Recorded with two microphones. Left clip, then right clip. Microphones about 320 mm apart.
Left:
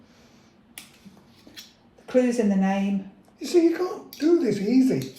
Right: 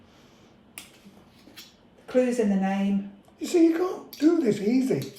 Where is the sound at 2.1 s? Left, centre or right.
Centre.